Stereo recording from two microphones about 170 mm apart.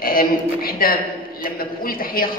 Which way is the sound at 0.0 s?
60° left (ahead or behind).